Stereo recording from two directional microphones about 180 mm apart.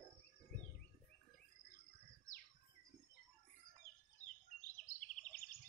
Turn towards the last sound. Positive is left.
turn(degrees=45)  # may be behind; listen again after turning